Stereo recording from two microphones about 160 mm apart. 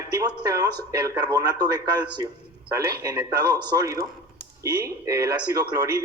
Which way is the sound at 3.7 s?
20° right (ahead or behind).